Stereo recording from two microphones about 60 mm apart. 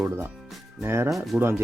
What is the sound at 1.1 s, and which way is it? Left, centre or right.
Speech, centre.